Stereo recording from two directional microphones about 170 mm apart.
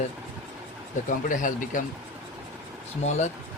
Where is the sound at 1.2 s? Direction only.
50° left (ahead or behind).